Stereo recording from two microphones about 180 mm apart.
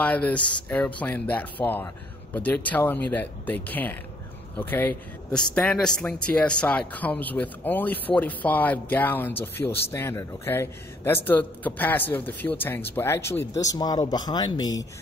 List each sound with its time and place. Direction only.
0.0 s a man's voice: 5° left (ahead or behind)